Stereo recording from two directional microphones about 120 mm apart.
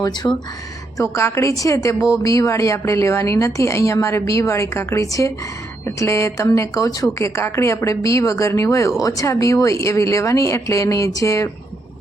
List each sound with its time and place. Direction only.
0.0 s speech: 35° left (ahead or behind)
0.9 s a woman's voice: 20° left (ahead or behind)